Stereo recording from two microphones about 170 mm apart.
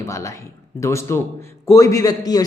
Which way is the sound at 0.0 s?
15° left (ahead or behind).